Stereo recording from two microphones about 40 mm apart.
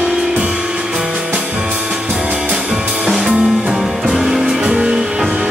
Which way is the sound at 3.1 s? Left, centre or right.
Centre.